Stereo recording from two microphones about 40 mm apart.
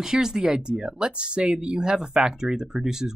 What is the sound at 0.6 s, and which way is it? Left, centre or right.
Speech, right.